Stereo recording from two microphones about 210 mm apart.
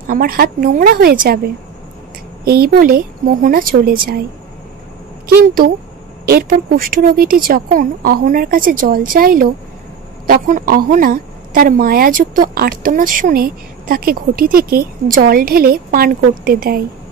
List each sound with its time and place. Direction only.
0.0 s a woman's voice: 40° right (ahead or behind)
5.3 s a woman's voice: 45° right (ahead or behind)